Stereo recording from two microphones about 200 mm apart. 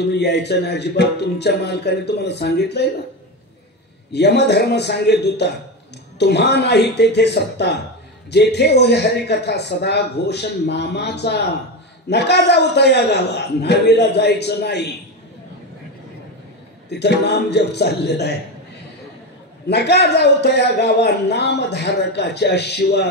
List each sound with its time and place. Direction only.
0.1 s speech: 55° left (ahead or behind)
4.1 s speech: 55° left (ahead or behind)
16.9 s speech: 55° left (ahead or behind)
19.7 s speech: 55° left (ahead or behind)